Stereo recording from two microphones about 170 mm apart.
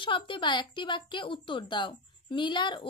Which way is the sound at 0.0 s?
30° left (ahead or behind).